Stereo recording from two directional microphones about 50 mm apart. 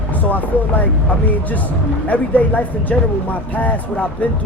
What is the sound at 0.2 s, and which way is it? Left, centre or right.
Speech, left.